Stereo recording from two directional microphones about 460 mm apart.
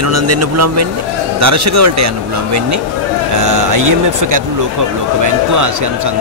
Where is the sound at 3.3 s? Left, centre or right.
Right.